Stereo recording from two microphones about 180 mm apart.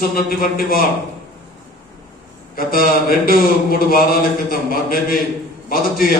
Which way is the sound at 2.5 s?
55° left (ahead or behind).